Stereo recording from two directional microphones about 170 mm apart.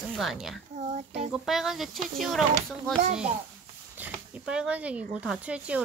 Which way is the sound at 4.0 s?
5° right (ahead or behind).